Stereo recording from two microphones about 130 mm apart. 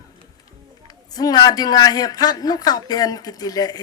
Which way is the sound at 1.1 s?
30° left (ahead or behind).